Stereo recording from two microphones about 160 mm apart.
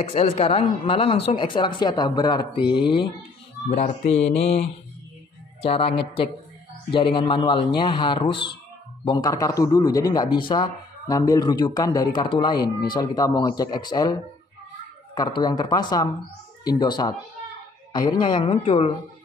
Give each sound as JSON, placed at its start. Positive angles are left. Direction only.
{"t": 0.0, "sound": "speech", "side_deg": 40}
{"t": 3.6, "sound": "speech", "side_deg": 50}
{"t": 15.1, "sound": "speech", "side_deg": 25}